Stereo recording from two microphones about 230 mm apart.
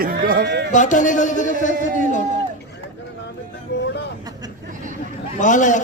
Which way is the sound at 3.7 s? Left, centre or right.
Left.